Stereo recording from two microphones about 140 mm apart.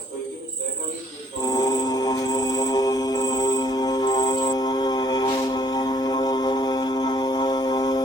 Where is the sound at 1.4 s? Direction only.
25° left (ahead or behind).